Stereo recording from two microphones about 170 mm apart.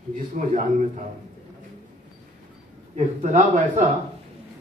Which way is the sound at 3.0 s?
45° right (ahead or behind).